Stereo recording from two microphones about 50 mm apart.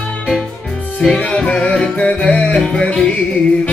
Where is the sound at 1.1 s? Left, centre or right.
Left.